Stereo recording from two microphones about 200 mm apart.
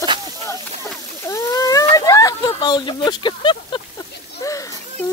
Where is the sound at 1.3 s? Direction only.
15° left (ahead or behind).